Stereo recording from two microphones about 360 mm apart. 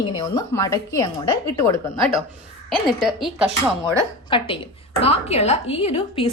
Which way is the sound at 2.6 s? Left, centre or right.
Centre.